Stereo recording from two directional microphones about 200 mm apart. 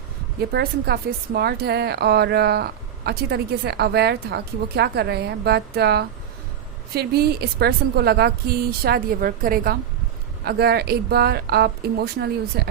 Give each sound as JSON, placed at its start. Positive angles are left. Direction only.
{"t": 0.5, "sound": "a woman's voice", "side_deg": -50}